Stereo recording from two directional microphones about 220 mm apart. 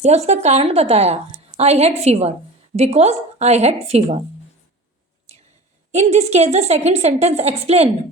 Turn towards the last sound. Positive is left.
turn(degrees=-30)  # may be behind; listen again after turning